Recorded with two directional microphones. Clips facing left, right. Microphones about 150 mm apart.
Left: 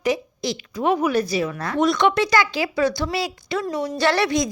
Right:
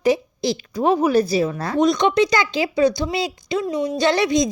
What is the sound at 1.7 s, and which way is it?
Speech, 20° right (ahead or behind).